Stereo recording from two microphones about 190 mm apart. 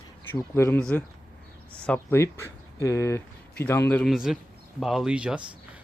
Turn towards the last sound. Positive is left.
turn(degrees=-5)  # may be behind; listen again after turning